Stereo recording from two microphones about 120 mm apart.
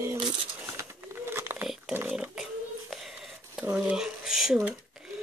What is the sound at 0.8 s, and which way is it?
Bird, 20° right (ahead or behind).